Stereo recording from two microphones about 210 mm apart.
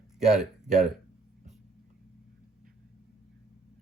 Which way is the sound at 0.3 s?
Centre (ahead or behind).